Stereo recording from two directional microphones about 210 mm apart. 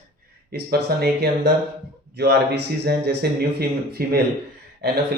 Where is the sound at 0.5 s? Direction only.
50° right (ahead or behind).